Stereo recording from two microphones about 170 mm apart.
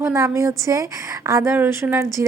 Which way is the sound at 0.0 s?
15° right (ahead or behind).